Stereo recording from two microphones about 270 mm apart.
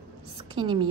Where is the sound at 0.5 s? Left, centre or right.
Centre.